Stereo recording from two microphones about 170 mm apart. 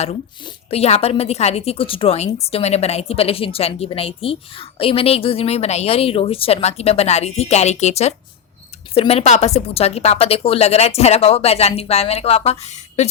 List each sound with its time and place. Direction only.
0.4 s a woman's voice: 35° left (ahead or behind)